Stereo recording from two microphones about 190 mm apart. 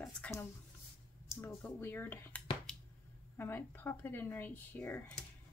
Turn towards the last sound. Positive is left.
turn(degrees=10)  # may be behind; listen again after turning